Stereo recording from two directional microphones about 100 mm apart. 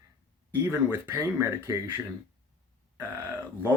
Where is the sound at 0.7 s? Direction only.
25° right (ahead or behind).